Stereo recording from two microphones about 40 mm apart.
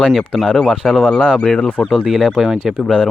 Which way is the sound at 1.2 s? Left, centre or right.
Left.